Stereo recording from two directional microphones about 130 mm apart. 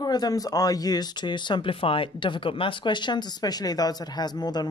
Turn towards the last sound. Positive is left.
turn(degrees=30)  # may be behind; listen again after turning